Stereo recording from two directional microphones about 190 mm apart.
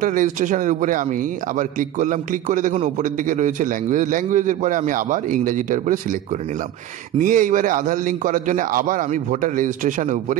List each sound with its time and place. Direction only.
0.0 s a man's voice: 45° right (ahead or behind)
7.2 s a man's voice: 45° right (ahead or behind)